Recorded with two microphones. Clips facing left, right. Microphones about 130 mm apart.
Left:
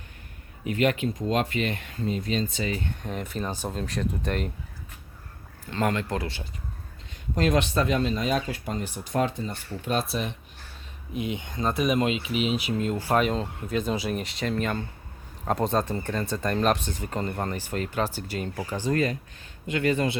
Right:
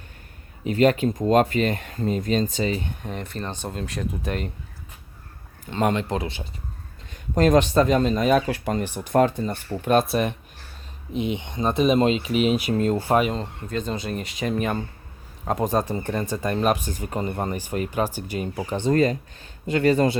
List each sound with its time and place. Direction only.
0.6 s speech: 35° right (ahead or behind)
2.6 s speech: 25° right (ahead or behind)
3.0 s speech: centre (ahead or behind)
5.7 s speech: 20° right (ahead or behind)
7.3 s speech: 40° right (ahead or behind)
8.5 s speech: 70° right (ahead or behind); by 10.3 s 55° right (ahead or behind)
11.1 s speech: 20° right (ahead or behind); by 13.0 s 45° right (ahead or behind)
13.1 s speech: centre (ahead or behind)
14.3 s speech: 15° right (ahead or behind)
18.9 s speech: 35° right (ahead or behind)